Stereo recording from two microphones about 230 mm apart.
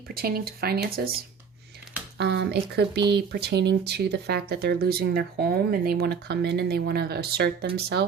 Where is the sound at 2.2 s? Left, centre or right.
Right.